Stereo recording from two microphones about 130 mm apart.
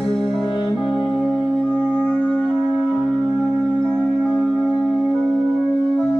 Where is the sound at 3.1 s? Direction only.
5° left (ahead or behind).